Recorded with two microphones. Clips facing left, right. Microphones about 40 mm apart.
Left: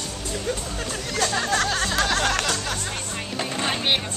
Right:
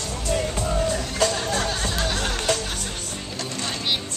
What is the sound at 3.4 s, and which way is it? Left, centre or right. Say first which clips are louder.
Vehicle: left 4 dB; left.